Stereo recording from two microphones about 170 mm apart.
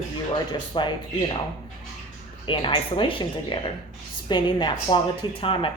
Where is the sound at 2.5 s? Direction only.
30° left (ahead or behind).